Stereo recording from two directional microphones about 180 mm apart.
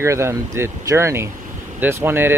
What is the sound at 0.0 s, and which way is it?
Speech, 15° right (ahead or behind).